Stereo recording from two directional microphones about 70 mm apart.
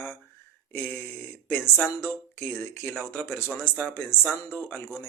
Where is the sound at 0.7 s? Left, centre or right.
Left.